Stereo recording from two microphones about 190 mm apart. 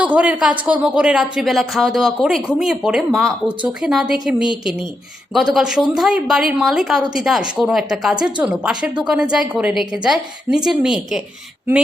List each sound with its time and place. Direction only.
0.0 s a woman's voice: 5° right (ahead or behind)
5.5 s speech: centre (ahead or behind)